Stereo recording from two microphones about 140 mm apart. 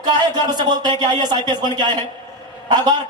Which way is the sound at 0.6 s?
30° right (ahead or behind).